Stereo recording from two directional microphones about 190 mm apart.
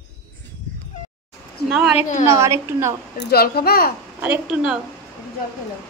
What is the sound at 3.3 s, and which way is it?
Speech, 55° left (ahead or behind).